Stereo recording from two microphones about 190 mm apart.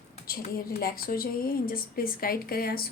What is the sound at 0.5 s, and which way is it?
Speech, 50° left (ahead or behind).